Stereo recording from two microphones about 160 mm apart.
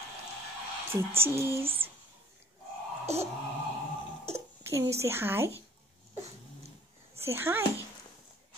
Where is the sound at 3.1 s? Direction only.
40° right (ahead or behind).